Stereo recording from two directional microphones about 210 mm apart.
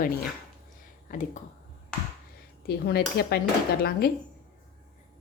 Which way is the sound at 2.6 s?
50° left (ahead or behind).